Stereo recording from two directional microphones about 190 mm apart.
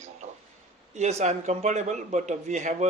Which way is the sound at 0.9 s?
35° right (ahead or behind).